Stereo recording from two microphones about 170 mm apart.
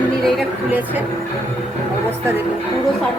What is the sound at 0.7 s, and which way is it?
Music, 10° right (ahead or behind).